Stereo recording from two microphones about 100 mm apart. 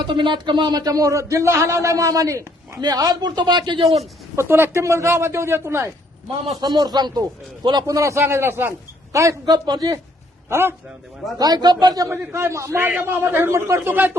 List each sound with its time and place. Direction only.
0.0 s a man's voice: 50° right (ahead or behind)
4.4 s a man's voice: 25° right (ahead or behind)
6.6 s speech: 45° right (ahead or behind)
9.5 s a man's voice: 45° right (ahead or behind)
10.5 s a man's voice: 25° right (ahead or behind)
11.3 s speech: 40° right (ahead or behind)
12.1 s a man's voice: 25° right (ahead or behind)